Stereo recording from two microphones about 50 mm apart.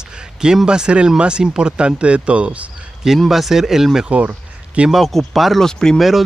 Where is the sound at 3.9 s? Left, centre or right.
Right.